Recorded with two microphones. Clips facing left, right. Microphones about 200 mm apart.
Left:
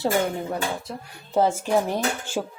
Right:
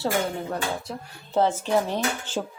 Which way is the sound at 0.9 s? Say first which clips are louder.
Even; centre (ahead or behind).